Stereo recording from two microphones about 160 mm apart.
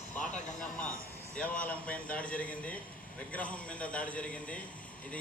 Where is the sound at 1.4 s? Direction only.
10° left (ahead or behind).